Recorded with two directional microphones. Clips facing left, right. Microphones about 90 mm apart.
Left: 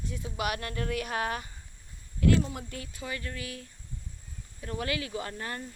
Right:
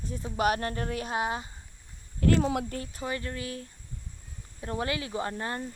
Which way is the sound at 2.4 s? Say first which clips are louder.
Right 5 dB; 70° right (ahead or behind).